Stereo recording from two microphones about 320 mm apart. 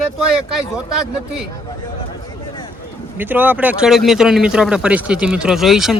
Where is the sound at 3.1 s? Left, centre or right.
Centre.